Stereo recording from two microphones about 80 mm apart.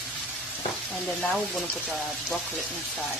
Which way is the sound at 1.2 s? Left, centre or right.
Centre.